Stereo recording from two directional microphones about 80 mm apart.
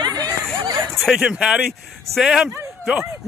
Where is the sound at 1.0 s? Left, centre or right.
Centre.